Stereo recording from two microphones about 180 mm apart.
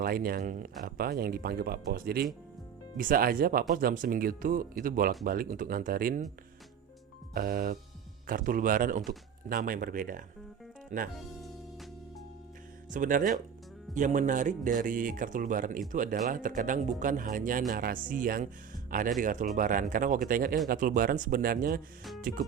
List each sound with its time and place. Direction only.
0.0 s speech: 55° right (ahead or behind)
7.3 s speech: 55° right (ahead or behind)
12.9 s speech: 45° right (ahead or behind)